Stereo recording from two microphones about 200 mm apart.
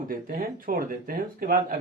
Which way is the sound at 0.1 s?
45° right (ahead or behind).